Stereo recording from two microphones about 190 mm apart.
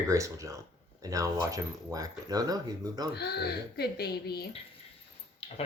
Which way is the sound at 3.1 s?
60° left (ahead or behind).